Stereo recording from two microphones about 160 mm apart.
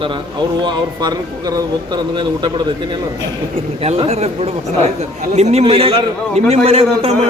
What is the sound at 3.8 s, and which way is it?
Speech, 40° right (ahead or behind).